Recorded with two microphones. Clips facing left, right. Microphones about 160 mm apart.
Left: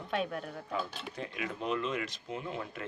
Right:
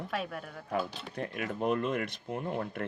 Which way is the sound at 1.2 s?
50° right (ahead or behind).